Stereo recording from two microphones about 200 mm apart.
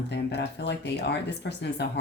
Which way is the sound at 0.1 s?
60° left (ahead or behind).